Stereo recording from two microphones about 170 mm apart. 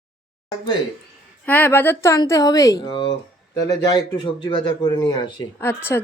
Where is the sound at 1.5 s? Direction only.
10° left (ahead or behind).